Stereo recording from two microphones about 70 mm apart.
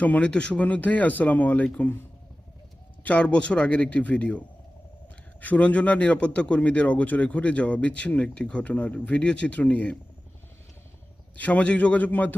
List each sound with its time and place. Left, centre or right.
0.0 s speech: centre
3.0 s a man's voice: centre
11.3 s speech: left